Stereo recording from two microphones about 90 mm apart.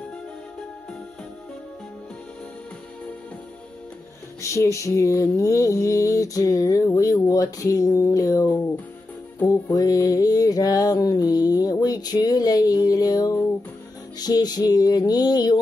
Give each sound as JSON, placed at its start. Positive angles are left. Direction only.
{"t": 4.4, "sound": "music", "side_deg": 35}
{"t": 9.7, "sound": "mantra", "side_deg": 45}